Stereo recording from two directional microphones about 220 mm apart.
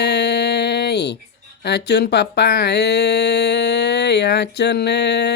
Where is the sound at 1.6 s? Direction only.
50° left (ahead or behind).